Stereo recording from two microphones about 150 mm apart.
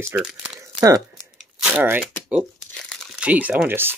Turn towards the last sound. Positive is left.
turn(degrees=-15)  # may be behind; listen again after turning